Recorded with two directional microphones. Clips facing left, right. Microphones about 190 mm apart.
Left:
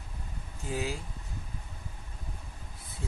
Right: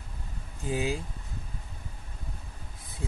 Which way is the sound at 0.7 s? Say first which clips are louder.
Right 4 dB; 15° right (ahead or behind).